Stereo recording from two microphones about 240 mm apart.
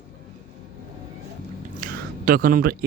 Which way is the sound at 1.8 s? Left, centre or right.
Right.